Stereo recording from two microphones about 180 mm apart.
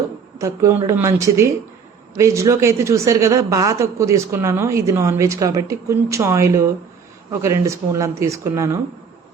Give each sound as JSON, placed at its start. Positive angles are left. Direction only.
{"t": 0.3, "sound": "speech", "side_deg": -15}